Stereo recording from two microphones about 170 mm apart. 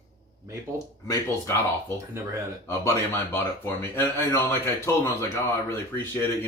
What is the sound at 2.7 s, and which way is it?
Speech, 15° left (ahead or behind).